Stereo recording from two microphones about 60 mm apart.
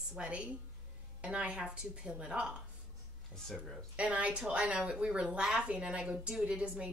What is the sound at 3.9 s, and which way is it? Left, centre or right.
A woman's voice, right.